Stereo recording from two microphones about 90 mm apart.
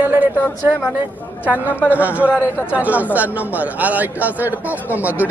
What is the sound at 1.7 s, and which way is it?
Speech, 20° left (ahead or behind).